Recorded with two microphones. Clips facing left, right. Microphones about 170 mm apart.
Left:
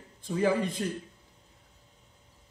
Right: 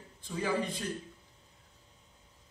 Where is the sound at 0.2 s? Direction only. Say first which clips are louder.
Left 6 dB; 50° left (ahead or behind).